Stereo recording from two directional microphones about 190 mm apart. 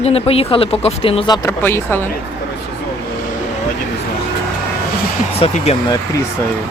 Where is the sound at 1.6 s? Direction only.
10° left (ahead or behind).